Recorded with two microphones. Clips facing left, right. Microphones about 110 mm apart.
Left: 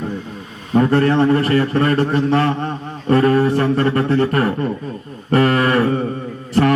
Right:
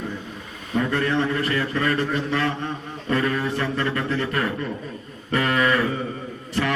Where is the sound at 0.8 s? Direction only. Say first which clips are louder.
Left 8 dB; 40° left (ahead or behind).